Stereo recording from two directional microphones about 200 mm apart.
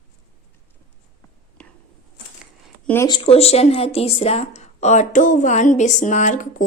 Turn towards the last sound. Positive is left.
turn(degrees=40)  # may be behind; listen again after turning